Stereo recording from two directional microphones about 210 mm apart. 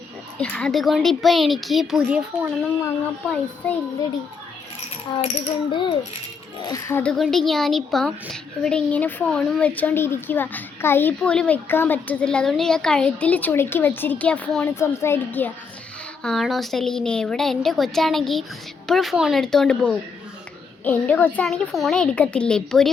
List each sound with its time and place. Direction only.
0.3 s a woman's voice: 5° left (ahead or behind)
5.2 s a sound: 30° left (ahead or behind)
6.6 s a woman's voice: 15° left (ahead or behind)